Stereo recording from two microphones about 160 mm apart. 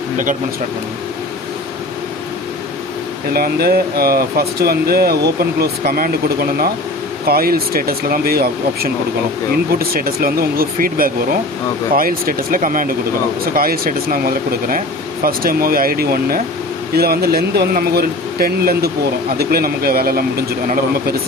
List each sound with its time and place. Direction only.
3.3 s speech: 70° right (ahead or behind)